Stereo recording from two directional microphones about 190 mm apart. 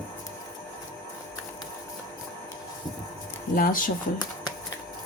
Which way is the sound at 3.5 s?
45° left (ahead or behind).